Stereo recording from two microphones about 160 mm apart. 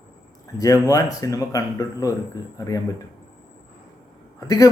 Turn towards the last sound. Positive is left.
turn(degrees=20)  # may be behind; listen again after turning